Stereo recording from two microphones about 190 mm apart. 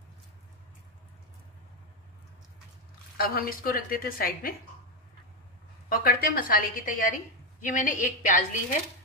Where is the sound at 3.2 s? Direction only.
50° left (ahead or behind).